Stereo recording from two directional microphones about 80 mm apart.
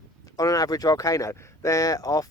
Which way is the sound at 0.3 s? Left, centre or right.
Left.